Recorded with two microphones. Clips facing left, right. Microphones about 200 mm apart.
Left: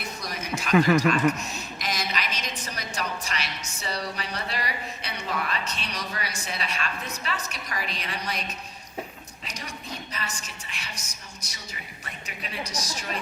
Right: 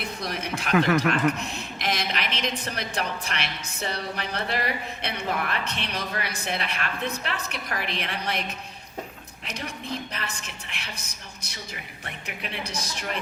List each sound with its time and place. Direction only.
0.3 s a sound: 60° right (ahead or behind)
0.9 s a woman's voice: 60° right (ahead or behind)
12.2 s a woman's voice: 60° right (ahead or behind)